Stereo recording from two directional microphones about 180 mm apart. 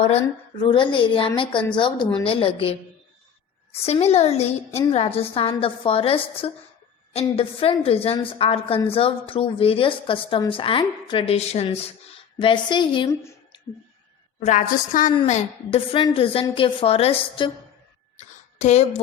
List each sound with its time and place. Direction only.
0.6 s a woman's voice: 25° left (ahead or behind)
14.4 s a woman's voice: 45° left (ahead or behind)
18.2 s a sound: 40° left (ahead or behind)